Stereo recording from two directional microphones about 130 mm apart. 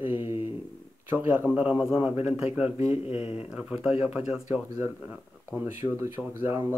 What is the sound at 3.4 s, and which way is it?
Speech, 10° right (ahead or behind).